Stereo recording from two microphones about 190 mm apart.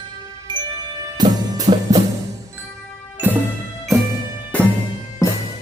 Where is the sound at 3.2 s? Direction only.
10° right (ahead or behind).